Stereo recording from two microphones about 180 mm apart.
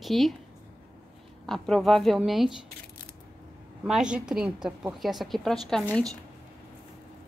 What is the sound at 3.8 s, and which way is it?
A woman's voice, 5° right (ahead or behind).